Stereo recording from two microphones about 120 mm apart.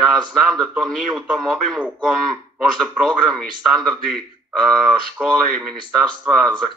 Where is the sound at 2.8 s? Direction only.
5° left (ahead or behind).